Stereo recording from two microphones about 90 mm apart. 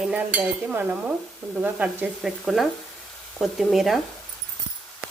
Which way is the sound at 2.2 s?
Centre (ahead or behind).